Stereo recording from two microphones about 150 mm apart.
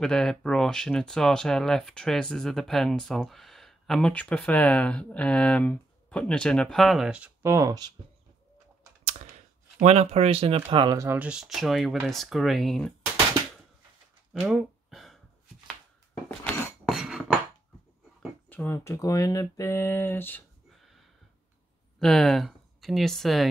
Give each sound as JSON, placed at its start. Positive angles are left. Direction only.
{"t": 0.0, "sound": "speech", "side_deg": 5}
{"t": 7.4, "sound": "speech", "side_deg": -20}
{"t": 9.8, "sound": "speech", "side_deg": -45}
{"t": 11.1, "sound": "speech", "side_deg": -10}
{"t": 14.3, "sound": "a sound", "side_deg": -5}
{"t": 16.3, "sound": "a sound", "side_deg": 5}
{"t": 18.5, "sound": "speech", "side_deg": 15}
{"t": 22.0, "sound": "speech", "side_deg": 0}